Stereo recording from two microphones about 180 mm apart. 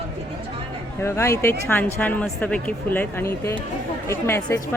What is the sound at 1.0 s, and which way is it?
Speech, 15° left (ahead or behind).